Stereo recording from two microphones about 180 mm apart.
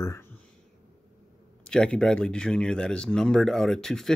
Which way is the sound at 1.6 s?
5° left (ahead or behind).